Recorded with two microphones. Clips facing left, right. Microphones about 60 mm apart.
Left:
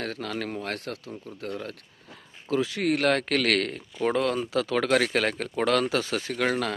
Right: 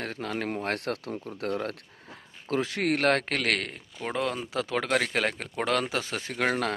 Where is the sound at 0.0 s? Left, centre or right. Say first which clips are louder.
Even; right.